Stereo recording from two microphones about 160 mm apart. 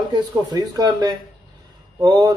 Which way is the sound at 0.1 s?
25° right (ahead or behind).